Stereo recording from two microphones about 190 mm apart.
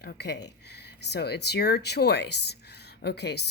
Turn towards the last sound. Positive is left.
turn(degrees=60)  # may be behind; listen again after turning